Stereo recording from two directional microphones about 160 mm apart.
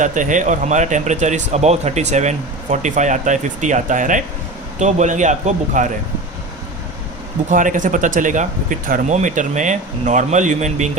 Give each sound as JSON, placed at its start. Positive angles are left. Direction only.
{"t": 0.0, "sound": "speech", "side_deg": -50}
{"t": 7.5, "sound": "speech", "side_deg": -55}